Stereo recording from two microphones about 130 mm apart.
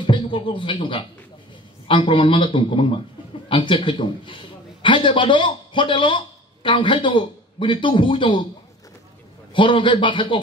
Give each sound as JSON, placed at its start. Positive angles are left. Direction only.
{"t": 0.0, "sound": "a man's voice", "side_deg": 40}
{"t": 9.5, "sound": "a man's voice", "side_deg": 40}